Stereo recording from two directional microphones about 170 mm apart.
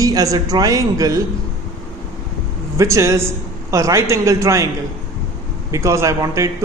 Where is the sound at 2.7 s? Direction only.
15° right (ahead or behind).